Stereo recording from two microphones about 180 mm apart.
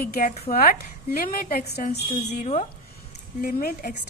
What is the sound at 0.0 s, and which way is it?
A woman's voice, 55° left (ahead or behind).